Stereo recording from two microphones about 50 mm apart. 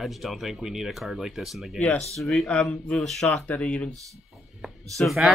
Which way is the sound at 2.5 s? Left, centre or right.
Left.